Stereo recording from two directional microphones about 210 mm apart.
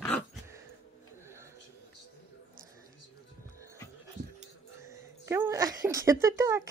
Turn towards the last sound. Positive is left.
turn(degrees=-15)  # may be behind; listen again after turning